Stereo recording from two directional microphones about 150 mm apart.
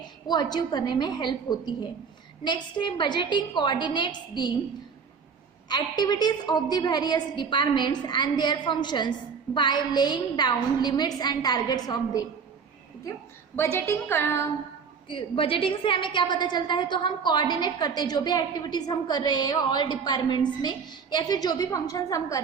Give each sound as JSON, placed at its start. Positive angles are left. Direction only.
{"t": 0.0, "sound": "a woman's voice", "side_deg": 25}
{"t": 5.6, "sound": "a woman's voice", "side_deg": 25}
{"t": 13.6, "sound": "a woman's voice", "side_deg": 15}
{"t": 15.0, "sound": "a woman's voice", "side_deg": 35}